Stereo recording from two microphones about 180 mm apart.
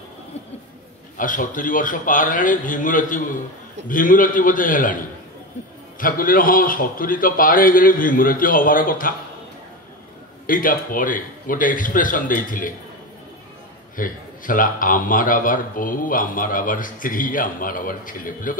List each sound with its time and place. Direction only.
1.1 s a man's voice: 50° left (ahead or behind)
5.9 s a man's voice: 50° left (ahead or behind)
10.4 s a man's voice: 50° left (ahead or behind)
13.9 s a man's voice: 50° left (ahead or behind)